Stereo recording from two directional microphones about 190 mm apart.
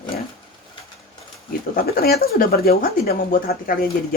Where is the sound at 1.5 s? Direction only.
50° left (ahead or behind).